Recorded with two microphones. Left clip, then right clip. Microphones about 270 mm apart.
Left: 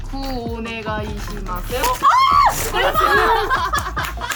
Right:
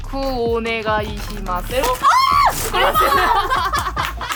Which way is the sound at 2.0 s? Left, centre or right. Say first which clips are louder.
Left 1 dB; right.